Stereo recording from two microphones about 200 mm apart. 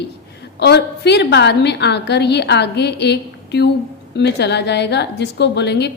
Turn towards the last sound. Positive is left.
turn(degrees=60)  # may be behind; listen again after turning